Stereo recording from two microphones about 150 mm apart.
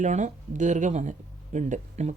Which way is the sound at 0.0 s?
55° right (ahead or behind).